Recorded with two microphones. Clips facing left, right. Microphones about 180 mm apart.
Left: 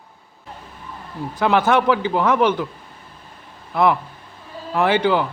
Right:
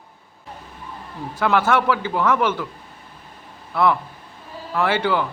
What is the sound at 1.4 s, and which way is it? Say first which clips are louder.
A man's voice: left 2 dB; 20° left (ahead or behind).